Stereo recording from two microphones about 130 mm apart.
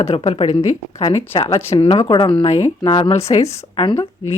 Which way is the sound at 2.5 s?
55° left (ahead or behind).